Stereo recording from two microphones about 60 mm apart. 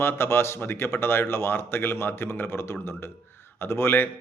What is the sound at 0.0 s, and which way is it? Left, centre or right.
A man's voice, left.